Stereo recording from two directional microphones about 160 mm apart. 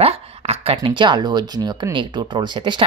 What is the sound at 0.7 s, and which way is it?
Speech, 30° right (ahead or behind).